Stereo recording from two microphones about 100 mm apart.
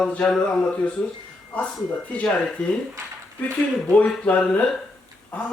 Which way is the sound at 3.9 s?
15° left (ahead or behind).